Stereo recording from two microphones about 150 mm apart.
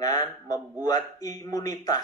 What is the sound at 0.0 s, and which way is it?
A man's voice, 25° left (ahead or behind).